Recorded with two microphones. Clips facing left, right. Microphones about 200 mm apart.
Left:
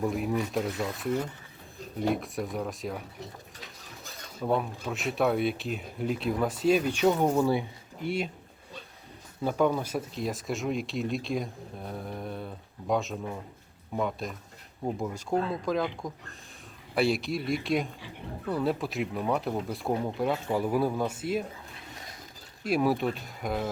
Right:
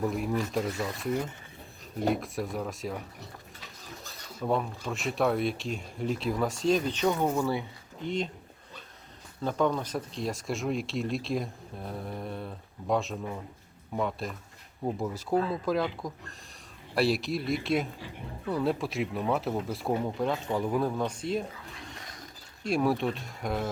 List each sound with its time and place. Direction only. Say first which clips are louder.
0.0 s speech: left 1 dB; centre (ahead or behind)
4.4 s speech: left 1 dB; 5° left (ahead or behind)
9.4 s speech: left 2 dB; 10° left (ahead or behind)
22.6 s speech: left 1 dB; 5° left (ahead or behind)